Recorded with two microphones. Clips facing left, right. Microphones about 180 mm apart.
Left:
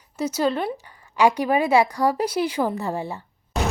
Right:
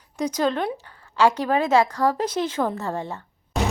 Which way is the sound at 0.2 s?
5° left (ahead or behind).